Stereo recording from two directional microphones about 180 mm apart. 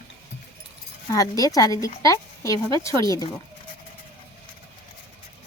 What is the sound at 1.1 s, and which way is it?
Speech, 20° left (ahead or behind).